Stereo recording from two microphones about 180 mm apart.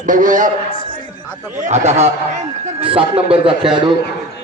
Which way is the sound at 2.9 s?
30° right (ahead or behind).